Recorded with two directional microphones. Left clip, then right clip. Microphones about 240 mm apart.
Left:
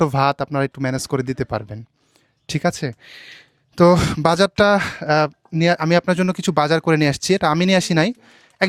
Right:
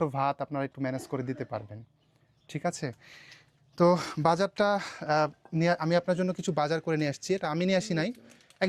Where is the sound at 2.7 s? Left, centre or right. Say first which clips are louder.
Left 10 dB; left.